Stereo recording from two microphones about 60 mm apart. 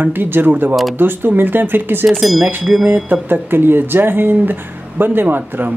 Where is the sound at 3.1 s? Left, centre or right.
Right.